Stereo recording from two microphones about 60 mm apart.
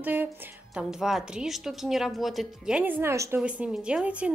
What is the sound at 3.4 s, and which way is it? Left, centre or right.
Speech, right.